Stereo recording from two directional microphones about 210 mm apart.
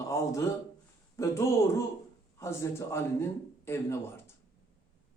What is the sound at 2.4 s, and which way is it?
A man's voice, 15° left (ahead or behind).